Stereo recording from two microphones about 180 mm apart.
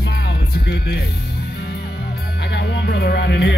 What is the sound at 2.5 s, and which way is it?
Speech, 65° left (ahead or behind).